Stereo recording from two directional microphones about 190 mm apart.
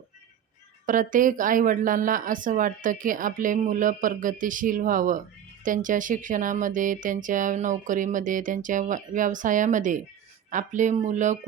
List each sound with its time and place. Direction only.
0.9 s speech: 45° right (ahead or behind)